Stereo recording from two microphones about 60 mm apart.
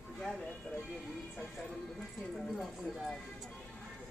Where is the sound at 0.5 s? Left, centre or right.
Left.